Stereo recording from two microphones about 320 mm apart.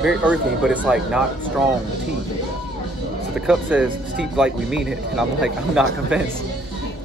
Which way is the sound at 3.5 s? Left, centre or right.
Centre.